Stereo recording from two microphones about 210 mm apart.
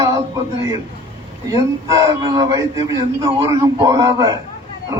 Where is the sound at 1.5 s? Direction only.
15° right (ahead or behind).